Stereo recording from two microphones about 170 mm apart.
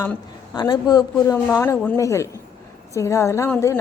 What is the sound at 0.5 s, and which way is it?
A woman's voice, 25° left (ahead or behind).